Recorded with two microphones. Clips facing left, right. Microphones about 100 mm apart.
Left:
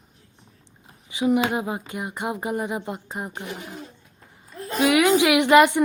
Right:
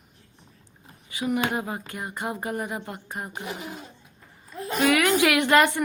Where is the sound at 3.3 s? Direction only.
15° right (ahead or behind).